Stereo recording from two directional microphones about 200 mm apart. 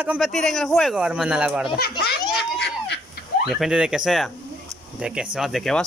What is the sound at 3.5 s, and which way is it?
Speech, centre (ahead or behind).